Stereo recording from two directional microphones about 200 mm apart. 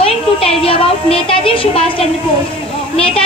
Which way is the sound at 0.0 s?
30° left (ahead or behind).